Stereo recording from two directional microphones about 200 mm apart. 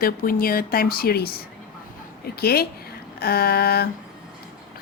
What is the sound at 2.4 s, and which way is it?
A woman's voice, 50° left (ahead or behind).